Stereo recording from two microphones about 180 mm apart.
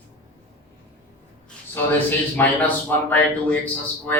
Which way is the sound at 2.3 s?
10° left (ahead or behind).